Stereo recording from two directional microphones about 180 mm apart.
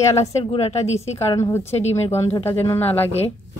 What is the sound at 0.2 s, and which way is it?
Speech, 35° left (ahead or behind).